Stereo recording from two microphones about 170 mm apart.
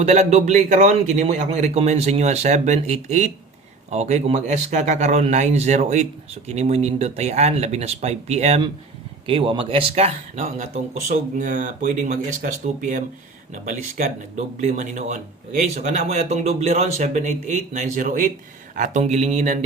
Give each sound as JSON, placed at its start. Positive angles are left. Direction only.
{"t": 0.0, "sound": "a man's voice", "side_deg": -40}